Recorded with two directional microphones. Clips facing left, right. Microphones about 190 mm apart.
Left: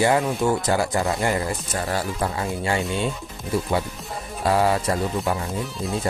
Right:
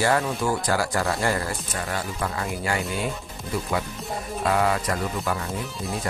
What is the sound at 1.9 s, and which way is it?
Speech, 30° left (ahead or behind).